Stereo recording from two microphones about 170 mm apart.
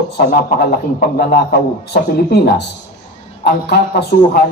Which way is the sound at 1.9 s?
75° left (ahead or behind).